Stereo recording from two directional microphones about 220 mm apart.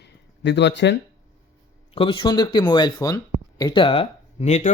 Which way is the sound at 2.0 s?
20° left (ahead or behind).